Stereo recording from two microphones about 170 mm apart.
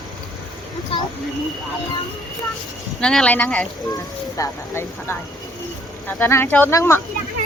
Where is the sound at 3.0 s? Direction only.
5° left (ahead or behind).